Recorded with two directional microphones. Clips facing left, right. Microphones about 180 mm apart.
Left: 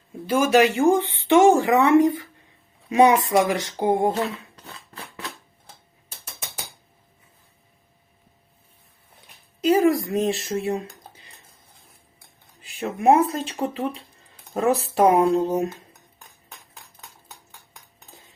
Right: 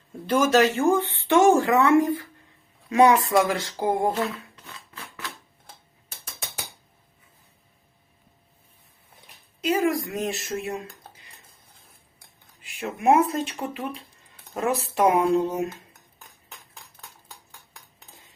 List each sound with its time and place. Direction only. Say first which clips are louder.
0.3 s speech: left 2 dB; 10° left (ahead or behind); by 5.3 s 35° left (ahead or behind)
9.6 s speech: left 5 dB; 30° left (ahead or behind)
12.6 s speech: left 3 dB; 35° left (ahead or behind)